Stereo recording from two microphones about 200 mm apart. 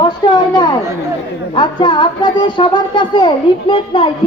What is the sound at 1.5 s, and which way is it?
A man's voice, 25° left (ahead or behind).